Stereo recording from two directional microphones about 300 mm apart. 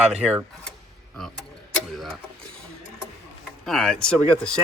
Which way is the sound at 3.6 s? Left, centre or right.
Centre.